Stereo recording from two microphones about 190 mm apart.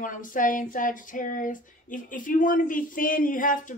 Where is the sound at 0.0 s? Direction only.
45° left (ahead or behind).